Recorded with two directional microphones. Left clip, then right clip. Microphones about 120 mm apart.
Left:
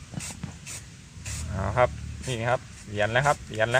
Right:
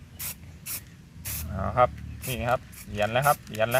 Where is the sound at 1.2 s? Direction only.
Centre (ahead or behind).